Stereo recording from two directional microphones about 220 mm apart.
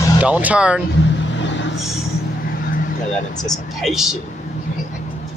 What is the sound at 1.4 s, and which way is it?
Vehicle, 55° left (ahead or behind).